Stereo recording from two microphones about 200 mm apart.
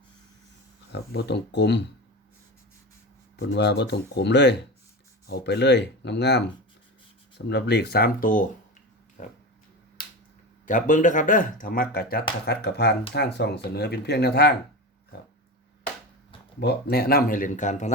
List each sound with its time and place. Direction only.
0.9 s speech: 55° left (ahead or behind)
3.3 s speech: 60° left (ahead or behind); by 9.3 s 40° left (ahead or behind)
10.7 s speech: 40° left (ahead or behind)
16.6 s speech: 55° left (ahead or behind); by 17.9 s 35° left (ahead or behind)